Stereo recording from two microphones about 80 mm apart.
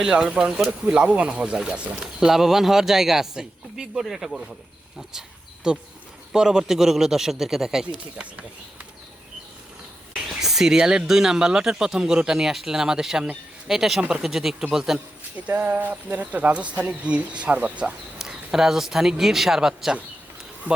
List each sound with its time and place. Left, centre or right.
0.0 s a man's voice: centre
5.7 s a man's voice: centre
8.1 s speech: centre
10.4 s a man's voice: centre
15.4 s speech: right
18.2 s speech: centre